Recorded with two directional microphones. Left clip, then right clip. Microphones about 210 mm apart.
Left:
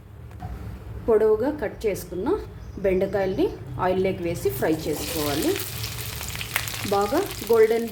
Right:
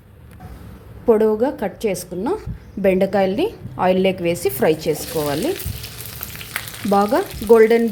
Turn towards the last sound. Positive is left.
turn(degrees=-40)  # may be behind; listen again after turning